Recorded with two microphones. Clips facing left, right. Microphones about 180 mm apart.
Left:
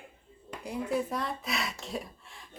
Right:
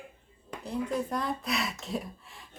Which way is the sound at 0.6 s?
10° left (ahead or behind).